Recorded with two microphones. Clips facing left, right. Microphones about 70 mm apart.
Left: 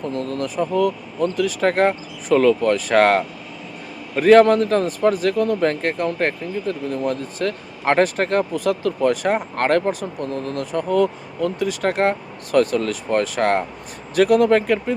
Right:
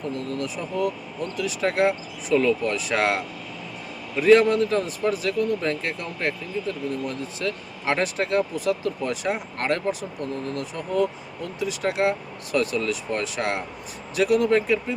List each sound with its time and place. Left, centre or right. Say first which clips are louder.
0.1 s speech: left 4 dB; left